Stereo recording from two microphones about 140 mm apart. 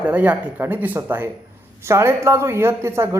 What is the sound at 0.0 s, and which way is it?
Speech, 10° right (ahead or behind).